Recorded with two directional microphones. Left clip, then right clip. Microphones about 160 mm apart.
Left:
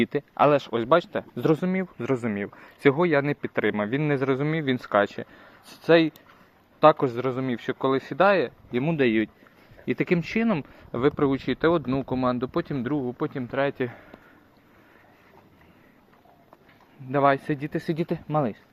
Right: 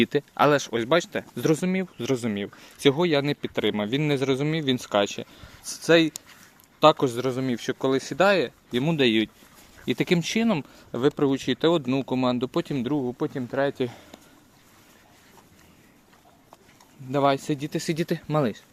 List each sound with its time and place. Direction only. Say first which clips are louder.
0.0 s speech: even; 30° right (ahead or behind)
10.7 s speech: even; 15° right (ahead or behind)
17.1 s speech: left 1 dB; 25° right (ahead or behind)